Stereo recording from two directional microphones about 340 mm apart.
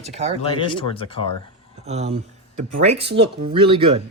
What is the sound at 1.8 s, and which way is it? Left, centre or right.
Speech, centre.